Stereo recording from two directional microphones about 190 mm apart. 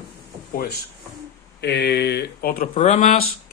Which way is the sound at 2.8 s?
40° left (ahead or behind).